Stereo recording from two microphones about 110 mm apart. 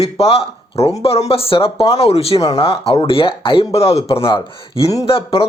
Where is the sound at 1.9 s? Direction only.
70° left (ahead or behind).